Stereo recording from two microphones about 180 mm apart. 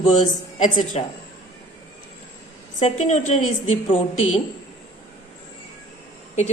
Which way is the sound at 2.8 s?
40° left (ahead or behind).